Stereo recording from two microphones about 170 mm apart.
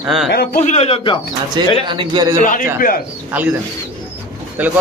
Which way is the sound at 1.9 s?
25° right (ahead or behind).